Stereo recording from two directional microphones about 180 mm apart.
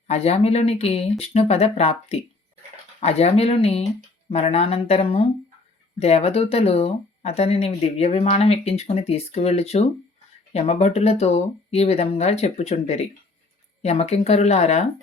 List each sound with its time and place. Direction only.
0.1 s speech: 35° left (ahead or behind)